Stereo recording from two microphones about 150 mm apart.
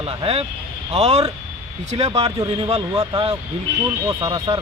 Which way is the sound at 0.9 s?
45° right (ahead or behind).